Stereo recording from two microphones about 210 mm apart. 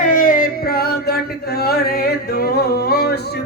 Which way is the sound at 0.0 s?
40° left (ahead or behind).